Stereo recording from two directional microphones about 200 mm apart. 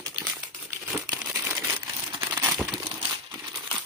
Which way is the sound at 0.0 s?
15° right (ahead or behind).